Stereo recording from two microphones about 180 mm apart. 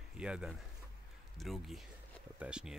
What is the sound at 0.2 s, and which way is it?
Speech, 5° right (ahead or behind).